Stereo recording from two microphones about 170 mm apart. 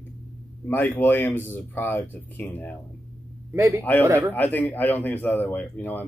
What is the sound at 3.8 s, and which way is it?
Speech, 10° left (ahead or behind).